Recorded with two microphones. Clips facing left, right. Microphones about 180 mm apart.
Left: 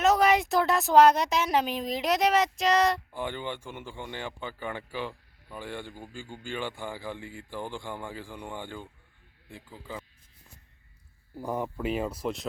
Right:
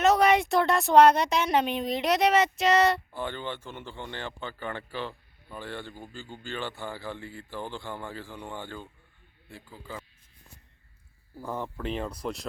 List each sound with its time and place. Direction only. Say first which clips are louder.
0.0 s speech: right 1 dB; centre (ahead or behind)
3.1 s speech: even; 15° left (ahead or behind)
11.3 s speech: left 3 dB; 15° left (ahead or behind)